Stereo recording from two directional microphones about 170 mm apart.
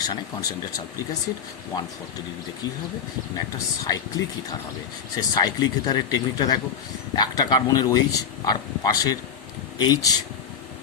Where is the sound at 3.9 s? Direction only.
20° left (ahead or behind).